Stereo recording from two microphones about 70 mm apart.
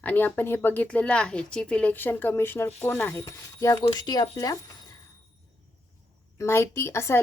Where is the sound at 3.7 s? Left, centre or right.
Left.